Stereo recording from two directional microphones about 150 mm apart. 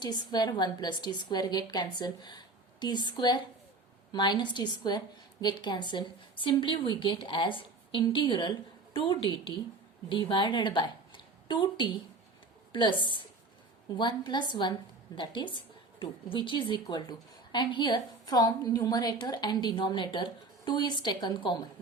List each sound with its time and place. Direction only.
0.0 s a woman's voice: 30° left (ahead or behind)